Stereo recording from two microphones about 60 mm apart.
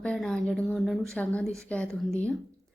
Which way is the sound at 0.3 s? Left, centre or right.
Centre.